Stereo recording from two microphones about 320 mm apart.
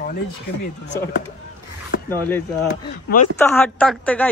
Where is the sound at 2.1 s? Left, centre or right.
Centre.